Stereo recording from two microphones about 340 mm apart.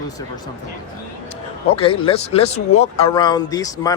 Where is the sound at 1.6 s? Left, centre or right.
Centre.